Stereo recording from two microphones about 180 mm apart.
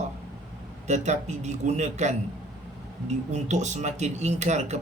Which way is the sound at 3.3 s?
40° right (ahead or behind).